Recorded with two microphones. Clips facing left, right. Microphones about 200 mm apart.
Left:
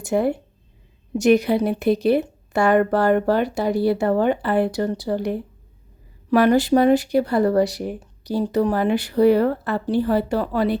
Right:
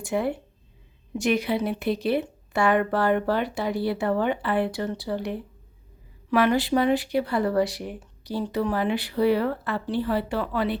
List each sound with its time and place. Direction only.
0.0 s speech: 45° left (ahead or behind)